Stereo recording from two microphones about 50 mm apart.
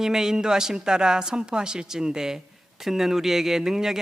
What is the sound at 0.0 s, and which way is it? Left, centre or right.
A man's voice, centre.